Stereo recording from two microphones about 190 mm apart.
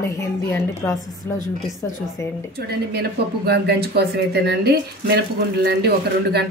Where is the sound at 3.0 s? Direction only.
60° right (ahead or behind).